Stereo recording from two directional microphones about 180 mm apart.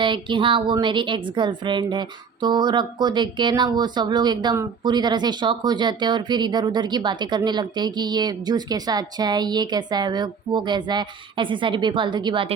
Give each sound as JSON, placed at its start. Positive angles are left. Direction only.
{"t": 0.0, "sound": "speech", "side_deg": -25}